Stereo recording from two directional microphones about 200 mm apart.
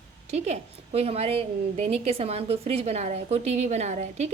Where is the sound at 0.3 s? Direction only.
35° right (ahead or behind).